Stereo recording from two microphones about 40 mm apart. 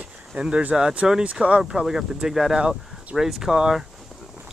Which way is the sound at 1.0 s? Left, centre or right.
Centre.